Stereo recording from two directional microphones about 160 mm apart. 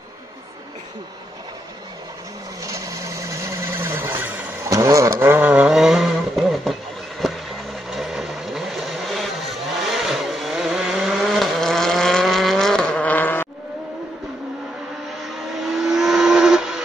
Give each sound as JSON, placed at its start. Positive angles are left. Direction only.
{"t": 2.6, "sound": "a sound", "side_deg": -20}
{"t": 4.6, "sound": "vehicle", "side_deg": -20}
{"t": 15.2, "sound": "vehicle", "side_deg": 0}